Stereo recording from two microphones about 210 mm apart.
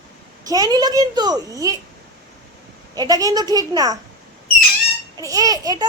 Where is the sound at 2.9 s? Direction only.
20° right (ahead or behind).